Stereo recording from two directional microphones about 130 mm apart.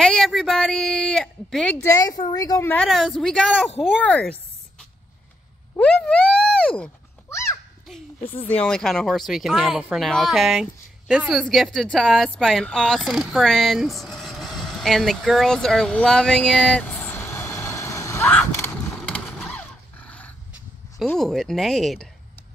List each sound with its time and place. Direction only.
0.0 s a woman's voice: 5° left (ahead or behind)
1.8 s a woman's voice: 30° left (ahead or behind)
2.7 s speech: 5° left (ahead or behind)
4.0 s a sound: 10° left (ahead or behind)
5.8 s speech: 5° left (ahead or behind)
7.2 s a sound: 20° left (ahead or behind)
8.5 s speech: 10° left (ahead or behind)
18.5 s mechanisms: 15° left (ahead or behind)
19.4 s a sound: 5° left (ahead or behind)
21.0 s speech: 5° left (ahead or behind)